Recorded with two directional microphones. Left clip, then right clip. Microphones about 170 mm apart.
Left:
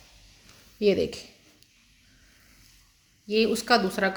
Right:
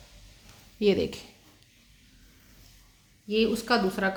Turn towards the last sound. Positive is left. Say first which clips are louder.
# left 3 dB
turn(degrees=25)  # may be behind; listen again after turning